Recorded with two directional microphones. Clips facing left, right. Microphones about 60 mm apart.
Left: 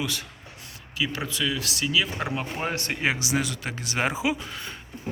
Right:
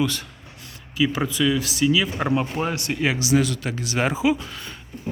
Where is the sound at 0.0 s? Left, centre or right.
Centre.